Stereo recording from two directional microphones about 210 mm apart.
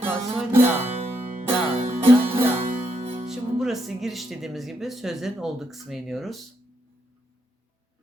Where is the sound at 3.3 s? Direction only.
Centre (ahead or behind).